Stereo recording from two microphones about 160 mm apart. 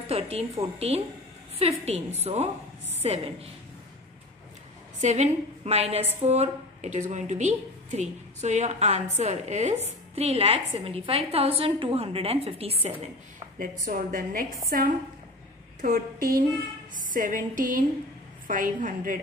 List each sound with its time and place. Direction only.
0.1 s a woman's voice: 40° right (ahead or behind)
5.0 s a woman's voice: 45° right (ahead or behind)
13.6 s a woman's voice: 60° right (ahead or behind)